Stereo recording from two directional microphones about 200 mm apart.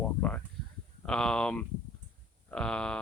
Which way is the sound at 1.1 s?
5° left (ahead or behind).